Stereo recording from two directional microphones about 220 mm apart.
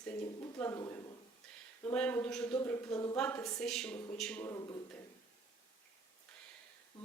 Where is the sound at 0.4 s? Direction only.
15° left (ahead or behind).